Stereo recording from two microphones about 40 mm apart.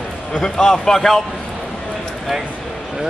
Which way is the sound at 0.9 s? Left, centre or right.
Centre.